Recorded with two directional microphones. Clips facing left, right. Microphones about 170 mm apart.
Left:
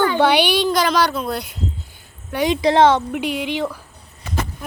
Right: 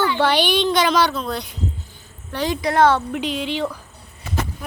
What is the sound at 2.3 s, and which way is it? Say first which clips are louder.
Speech: left 4 dB; 20° left (ahead or behind).